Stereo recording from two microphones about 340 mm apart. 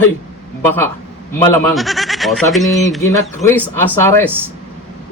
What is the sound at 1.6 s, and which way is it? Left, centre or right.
A man's voice, centre.